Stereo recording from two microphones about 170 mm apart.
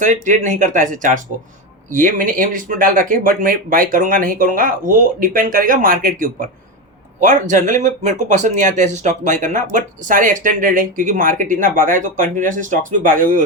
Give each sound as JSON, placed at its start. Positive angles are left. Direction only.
{"t": 0.0, "sound": "speech", "side_deg": -50}